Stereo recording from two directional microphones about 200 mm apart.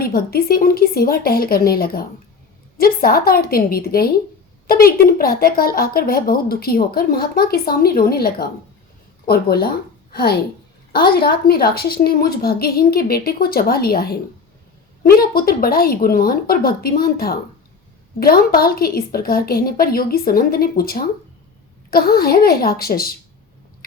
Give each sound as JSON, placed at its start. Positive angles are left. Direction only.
{"t": 0.0, "sound": "a woman's voice", "side_deg": 50}